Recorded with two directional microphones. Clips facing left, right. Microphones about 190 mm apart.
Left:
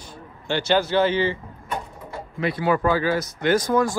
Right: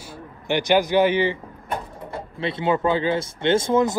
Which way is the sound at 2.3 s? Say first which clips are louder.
Left 1 dB; 25° right (ahead or behind).